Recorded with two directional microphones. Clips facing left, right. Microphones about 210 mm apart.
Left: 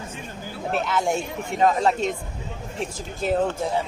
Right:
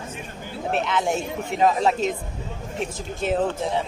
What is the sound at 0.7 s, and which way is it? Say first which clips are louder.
Speech: even; centre (ahead or behind).